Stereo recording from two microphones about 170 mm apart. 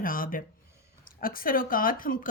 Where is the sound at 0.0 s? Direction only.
55° left (ahead or behind).